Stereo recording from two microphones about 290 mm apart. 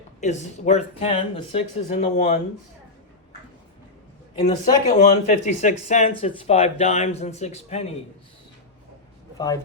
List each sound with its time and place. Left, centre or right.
0.2 s speech: left
4.4 s speech: left